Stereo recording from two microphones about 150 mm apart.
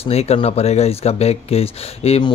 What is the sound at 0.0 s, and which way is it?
Speech, 45° left (ahead or behind).